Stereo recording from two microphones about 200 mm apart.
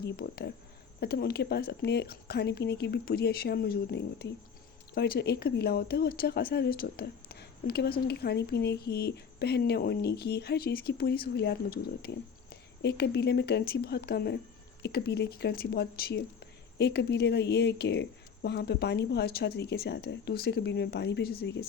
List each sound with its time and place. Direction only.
0.0 s speech: 55° left (ahead or behind)